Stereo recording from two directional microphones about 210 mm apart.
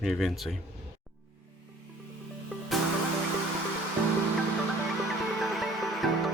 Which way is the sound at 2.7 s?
Centre (ahead or behind).